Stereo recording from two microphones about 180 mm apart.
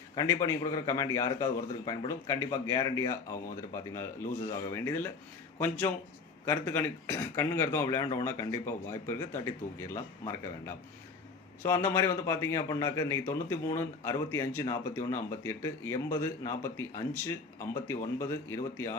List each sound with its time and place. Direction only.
0.2 s a man's voice: 15° left (ahead or behind)
11.6 s a man's voice: 15° left (ahead or behind)